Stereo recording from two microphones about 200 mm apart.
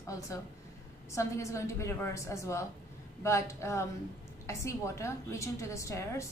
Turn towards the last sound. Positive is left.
turn(degrees=15)  # may be behind; listen again after turning